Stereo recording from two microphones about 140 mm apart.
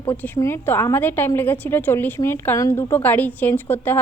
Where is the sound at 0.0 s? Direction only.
15° left (ahead or behind).